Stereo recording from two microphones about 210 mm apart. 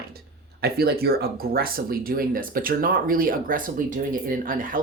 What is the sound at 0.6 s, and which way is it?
Speech, 45° right (ahead or behind).